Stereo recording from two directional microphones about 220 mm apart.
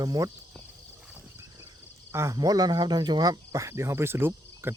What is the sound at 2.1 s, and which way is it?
Speech, 15° right (ahead or behind).